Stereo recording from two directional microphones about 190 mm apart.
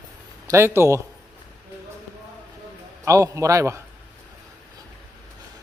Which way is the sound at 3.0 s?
15° right (ahead or behind).